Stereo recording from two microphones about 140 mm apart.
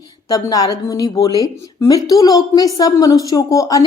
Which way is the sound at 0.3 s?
25° left (ahead or behind).